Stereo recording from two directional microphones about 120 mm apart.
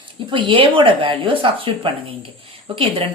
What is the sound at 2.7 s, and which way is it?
Speech, 50° right (ahead or behind).